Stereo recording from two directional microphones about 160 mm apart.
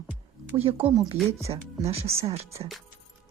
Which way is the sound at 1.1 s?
10° right (ahead or behind).